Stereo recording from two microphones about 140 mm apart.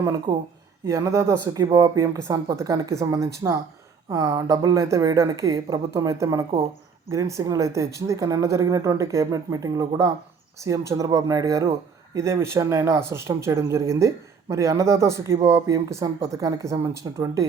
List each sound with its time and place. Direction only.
0.0 s speech: 25° right (ahead or behind)